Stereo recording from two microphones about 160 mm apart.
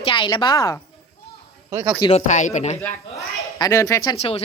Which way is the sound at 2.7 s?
20° left (ahead or behind).